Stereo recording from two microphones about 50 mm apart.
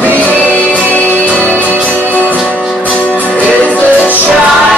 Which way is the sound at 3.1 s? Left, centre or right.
Left.